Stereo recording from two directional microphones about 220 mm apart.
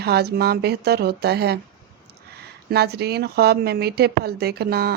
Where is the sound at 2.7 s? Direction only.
45° right (ahead or behind).